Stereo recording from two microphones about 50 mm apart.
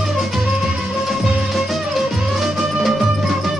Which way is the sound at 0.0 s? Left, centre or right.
Centre.